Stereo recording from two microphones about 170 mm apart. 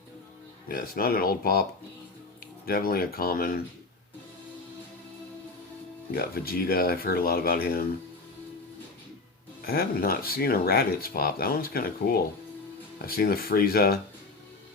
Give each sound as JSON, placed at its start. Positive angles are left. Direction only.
{"t": 0.7, "sound": "speech", "side_deg": 60}
{"t": 2.6, "sound": "speech", "side_deg": 60}
{"t": 6.1, "sound": "speech", "side_deg": 60}
{"t": 9.6, "sound": "speech", "side_deg": 60}